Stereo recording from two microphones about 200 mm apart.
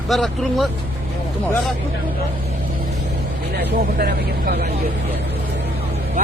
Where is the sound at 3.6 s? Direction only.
50° right (ahead or behind).